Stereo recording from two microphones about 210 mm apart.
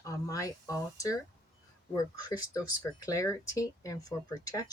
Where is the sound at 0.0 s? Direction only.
15° left (ahead or behind).